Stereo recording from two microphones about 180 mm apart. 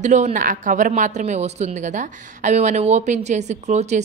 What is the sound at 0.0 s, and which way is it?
Speech, 40° right (ahead or behind).